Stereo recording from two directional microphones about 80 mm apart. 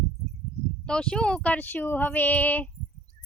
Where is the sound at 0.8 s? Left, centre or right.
Centre.